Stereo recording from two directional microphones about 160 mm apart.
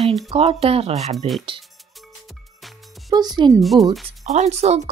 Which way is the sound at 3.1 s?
25° right (ahead or behind).